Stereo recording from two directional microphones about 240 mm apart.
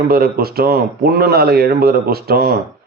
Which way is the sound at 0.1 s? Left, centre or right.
Right.